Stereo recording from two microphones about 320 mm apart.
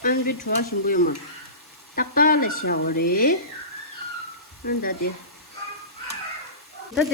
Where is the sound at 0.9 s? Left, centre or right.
Left.